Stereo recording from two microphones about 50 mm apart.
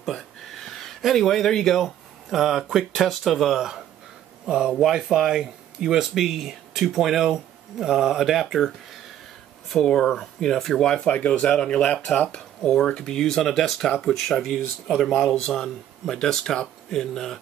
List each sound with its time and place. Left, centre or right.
0.0 s a sound: centre
1.9 s speech: centre
11.1 s speech: left
12.4 s speech: centre
15.1 s speech: centre